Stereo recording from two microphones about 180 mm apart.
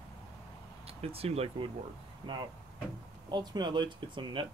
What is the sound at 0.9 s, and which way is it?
Speech, 35° right (ahead or behind).